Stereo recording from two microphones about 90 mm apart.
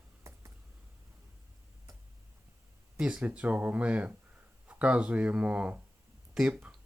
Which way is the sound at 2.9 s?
10° right (ahead or behind).